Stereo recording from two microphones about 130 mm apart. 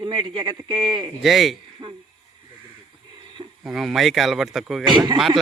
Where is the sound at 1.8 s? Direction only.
35° right (ahead or behind).